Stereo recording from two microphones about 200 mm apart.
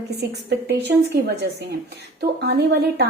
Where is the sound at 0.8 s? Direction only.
55° right (ahead or behind).